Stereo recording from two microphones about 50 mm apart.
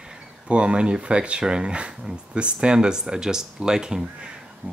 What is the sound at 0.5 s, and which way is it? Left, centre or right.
Speech, right.